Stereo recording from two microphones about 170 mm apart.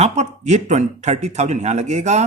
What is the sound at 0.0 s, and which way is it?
A man's voice, 40° right (ahead or behind).